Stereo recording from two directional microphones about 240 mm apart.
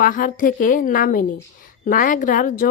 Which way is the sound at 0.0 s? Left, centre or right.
Left.